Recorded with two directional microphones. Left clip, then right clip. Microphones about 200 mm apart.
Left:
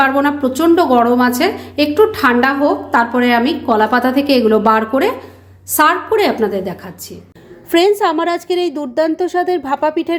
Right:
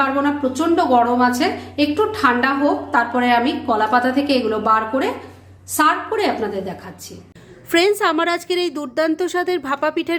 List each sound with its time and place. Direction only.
0.0 s a woman's voice: 40° left (ahead or behind)
7.7 s a woman's voice: centre (ahead or behind)